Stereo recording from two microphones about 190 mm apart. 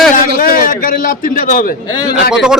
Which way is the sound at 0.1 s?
45° left (ahead or behind).